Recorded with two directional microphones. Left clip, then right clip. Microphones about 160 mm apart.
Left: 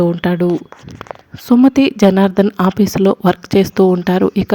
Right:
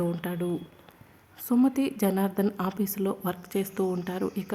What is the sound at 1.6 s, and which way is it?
A woman's voice, 40° left (ahead or behind).